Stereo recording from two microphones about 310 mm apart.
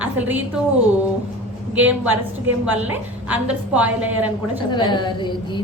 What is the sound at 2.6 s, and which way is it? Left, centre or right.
A woman's voice, centre.